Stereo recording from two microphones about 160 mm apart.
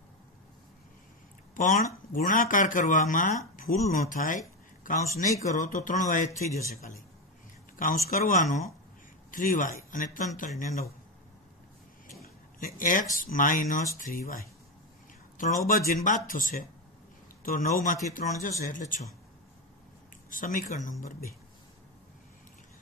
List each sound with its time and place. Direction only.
1.5 s speech: 55° left (ahead or behind)
7.7 s a sound: 60° left (ahead or behind)
8.1 s speech: 55° left (ahead or behind)
12.2 s a sound: 55° left (ahead or behind)
13.1 s a man's voice: 55° left (ahead or behind)
20.2 s speech: 60° left (ahead or behind)